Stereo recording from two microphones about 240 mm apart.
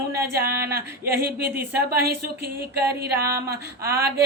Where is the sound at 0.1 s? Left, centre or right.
Right.